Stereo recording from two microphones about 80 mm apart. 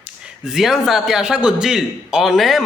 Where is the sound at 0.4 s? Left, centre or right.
Centre.